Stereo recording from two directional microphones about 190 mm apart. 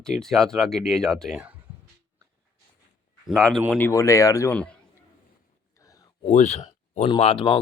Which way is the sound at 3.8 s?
15° left (ahead or behind).